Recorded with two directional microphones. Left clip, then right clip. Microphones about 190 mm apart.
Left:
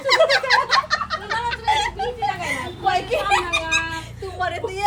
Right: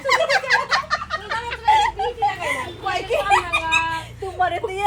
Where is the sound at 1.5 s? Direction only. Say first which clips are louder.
Right 4 dB; 20° right (ahead or behind).